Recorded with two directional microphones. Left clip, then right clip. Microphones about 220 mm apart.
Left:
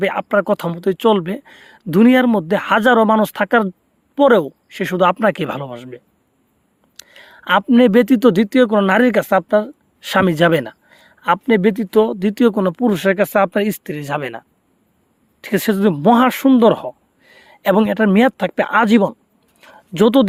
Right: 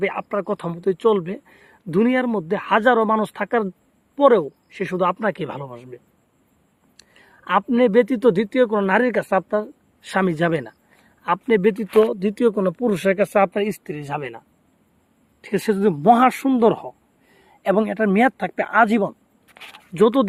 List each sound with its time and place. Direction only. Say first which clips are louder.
0.0 s speech: left 7 dB; 45° left (ahead or behind)